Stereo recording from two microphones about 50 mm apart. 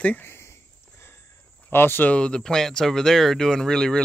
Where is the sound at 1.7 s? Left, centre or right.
Left.